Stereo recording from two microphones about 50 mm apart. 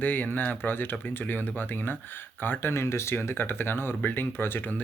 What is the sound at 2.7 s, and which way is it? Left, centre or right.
Speech, left.